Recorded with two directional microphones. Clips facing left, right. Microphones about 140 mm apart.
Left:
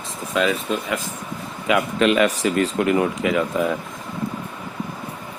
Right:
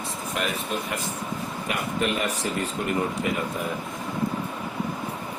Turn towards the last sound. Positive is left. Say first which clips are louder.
# left 7 dB
turn(degrees=90)